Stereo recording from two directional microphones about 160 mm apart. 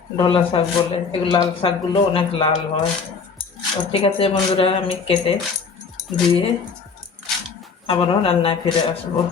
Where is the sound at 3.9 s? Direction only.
35° left (ahead or behind).